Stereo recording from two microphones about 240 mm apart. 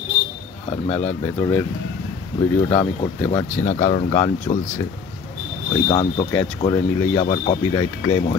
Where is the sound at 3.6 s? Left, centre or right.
Left.